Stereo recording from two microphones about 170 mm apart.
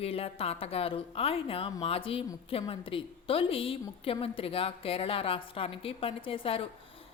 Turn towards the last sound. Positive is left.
turn(degrees=35)  # may be behind; listen again after turning